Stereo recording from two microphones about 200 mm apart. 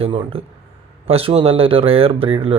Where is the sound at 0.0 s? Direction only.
25° right (ahead or behind).